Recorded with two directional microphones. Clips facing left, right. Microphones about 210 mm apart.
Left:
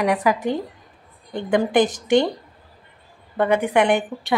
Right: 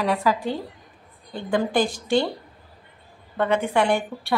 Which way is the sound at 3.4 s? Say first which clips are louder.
Left 3 dB; 15° left (ahead or behind).